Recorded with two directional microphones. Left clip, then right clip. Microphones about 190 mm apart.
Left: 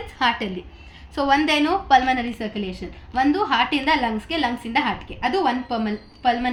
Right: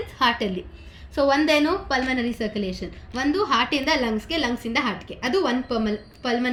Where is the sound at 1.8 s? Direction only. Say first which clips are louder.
Left 7 dB; 25° left (ahead or behind).